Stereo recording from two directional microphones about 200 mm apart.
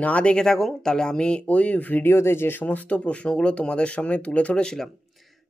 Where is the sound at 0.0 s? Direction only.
5° left (ahead or behind).